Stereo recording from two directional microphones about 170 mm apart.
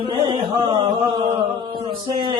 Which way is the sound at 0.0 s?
30° right (ahead or behind).